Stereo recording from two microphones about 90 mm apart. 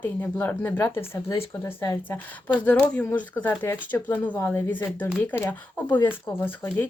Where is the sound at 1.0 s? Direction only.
35° left (ahead or behind).